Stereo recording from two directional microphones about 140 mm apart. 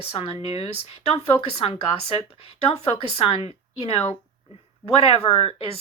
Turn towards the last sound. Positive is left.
turn(degrees=40)  # may be behind; listen again after turning